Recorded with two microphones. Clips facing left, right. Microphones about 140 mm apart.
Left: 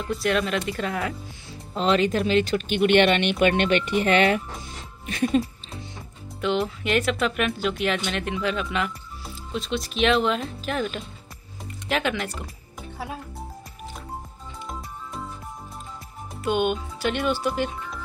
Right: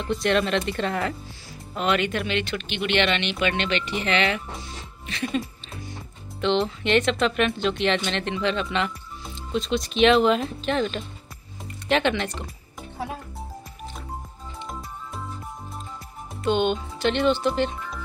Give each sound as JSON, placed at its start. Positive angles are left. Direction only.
{"t": 0.0, "sound": "speech", "side_deg": 5}
{"t": 1.7, "sound": "speech", "side_deg": 30}
{"t": 4.6, "sound": "music", "side_deg": 45}
{"t": 6.4, "sound": "speech", "side_deg": 5}
{"t": 16.3, "sound": "speech", "side_deg": 10}